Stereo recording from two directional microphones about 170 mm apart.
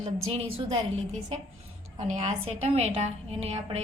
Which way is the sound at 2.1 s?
40° right (ahead or behind).